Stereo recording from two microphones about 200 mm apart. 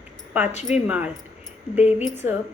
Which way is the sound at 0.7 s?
5° right (ahead or behind).